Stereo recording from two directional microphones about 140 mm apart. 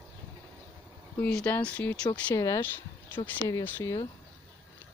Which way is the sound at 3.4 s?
20° left (ahead or behind).